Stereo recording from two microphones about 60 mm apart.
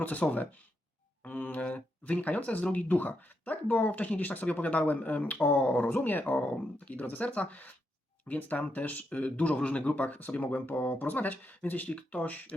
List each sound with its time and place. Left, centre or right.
0.0 s speech: left